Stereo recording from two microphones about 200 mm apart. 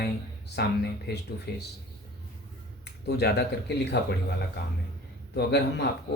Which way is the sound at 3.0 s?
55° left (ahead or behind).